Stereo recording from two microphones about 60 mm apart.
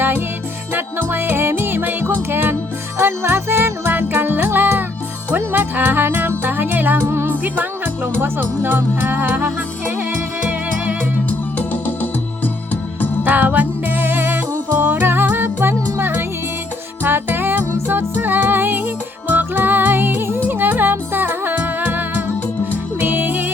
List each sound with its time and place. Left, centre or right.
0.7 s music: right
11.3 s music: left
13.2 s music: right